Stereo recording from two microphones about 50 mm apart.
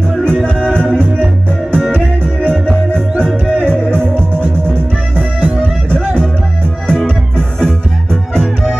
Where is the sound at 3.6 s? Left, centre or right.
Right.